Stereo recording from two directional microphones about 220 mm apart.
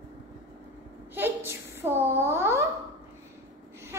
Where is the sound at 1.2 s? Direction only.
10° right (ahead or behind).